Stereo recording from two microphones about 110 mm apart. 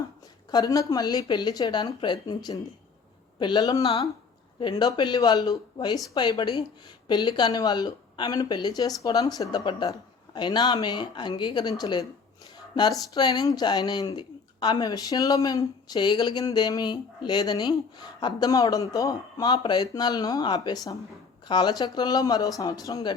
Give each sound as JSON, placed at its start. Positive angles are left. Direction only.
{"t": 0.5, "sound": "speech", "side_deg": 30}